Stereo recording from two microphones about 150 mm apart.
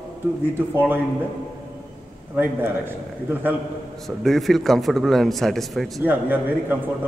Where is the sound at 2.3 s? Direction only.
15° right (ahead or behind).